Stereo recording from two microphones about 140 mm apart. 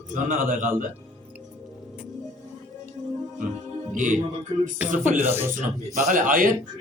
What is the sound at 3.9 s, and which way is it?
Speech, 65° right (ahead or behind).